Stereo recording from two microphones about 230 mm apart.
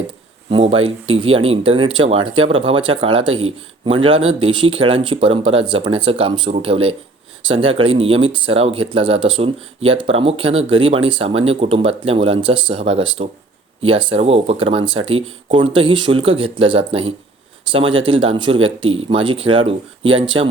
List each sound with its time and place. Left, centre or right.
0.5 s speech: right